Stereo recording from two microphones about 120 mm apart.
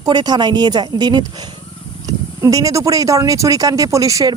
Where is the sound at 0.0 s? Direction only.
35° right (ahead or behind).